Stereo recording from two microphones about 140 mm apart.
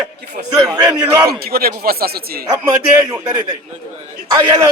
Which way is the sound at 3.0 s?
15° right (ahead or behind).